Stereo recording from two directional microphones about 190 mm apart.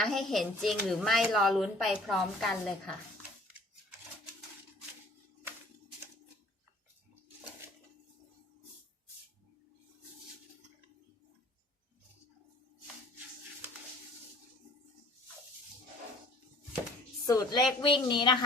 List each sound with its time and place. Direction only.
0.0 s a woman's voice: centre (ahead or behind)
7.6 s a sound: 15° right (ahead or behind)
17.2 s a woman's voice: 15° left (ahead or behind)